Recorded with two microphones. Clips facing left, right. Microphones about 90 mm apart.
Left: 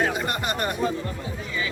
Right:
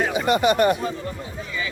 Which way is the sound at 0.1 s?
85° right.